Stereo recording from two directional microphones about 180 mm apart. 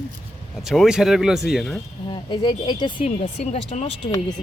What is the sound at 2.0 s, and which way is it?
Speech, 25° left (ahead or behind).